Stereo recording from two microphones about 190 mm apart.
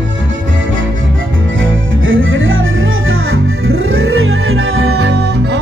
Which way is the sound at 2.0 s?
90° right.